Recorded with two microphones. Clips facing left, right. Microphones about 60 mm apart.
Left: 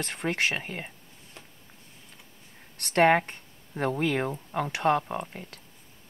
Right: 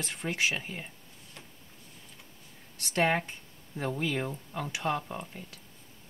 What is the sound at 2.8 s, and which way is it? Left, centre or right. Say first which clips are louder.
Speech: left 7 dB; left.